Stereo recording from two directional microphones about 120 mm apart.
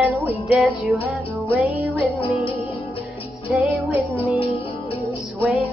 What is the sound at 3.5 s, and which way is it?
Music, 15° right (ahead or behind).